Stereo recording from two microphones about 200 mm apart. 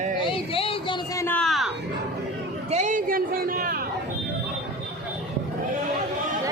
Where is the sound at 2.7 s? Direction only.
35° right (ahead or behind).